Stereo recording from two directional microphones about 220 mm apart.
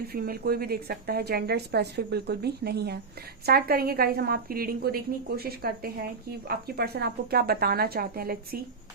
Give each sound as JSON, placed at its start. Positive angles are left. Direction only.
{"t": 0.1, "sound": "a woman's voice", "side_deg": -45}